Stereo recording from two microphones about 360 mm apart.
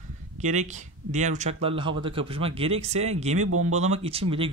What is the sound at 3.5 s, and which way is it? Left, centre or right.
Speech, right.